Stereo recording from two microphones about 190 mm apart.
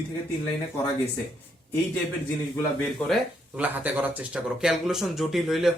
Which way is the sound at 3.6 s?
10° right (ahead or behind).